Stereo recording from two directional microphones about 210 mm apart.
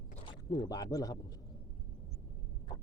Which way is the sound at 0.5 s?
20° left (ahead or behind).